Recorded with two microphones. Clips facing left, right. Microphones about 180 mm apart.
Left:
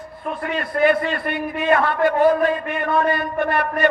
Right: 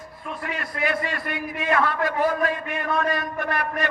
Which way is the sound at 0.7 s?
55° left (ahead or behind).